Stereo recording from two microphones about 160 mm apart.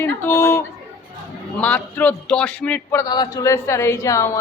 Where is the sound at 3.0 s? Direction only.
25° left (ahead or behind).